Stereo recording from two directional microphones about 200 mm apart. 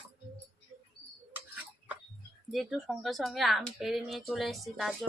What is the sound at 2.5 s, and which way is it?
A woman's voice, centre (ahead or behind).